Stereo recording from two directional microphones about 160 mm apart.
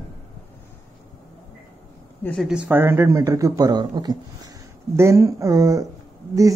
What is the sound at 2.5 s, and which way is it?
Speech, 10° right (ahead or behind).